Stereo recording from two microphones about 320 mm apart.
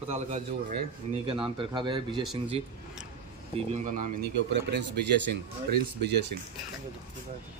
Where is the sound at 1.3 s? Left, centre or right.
Centre.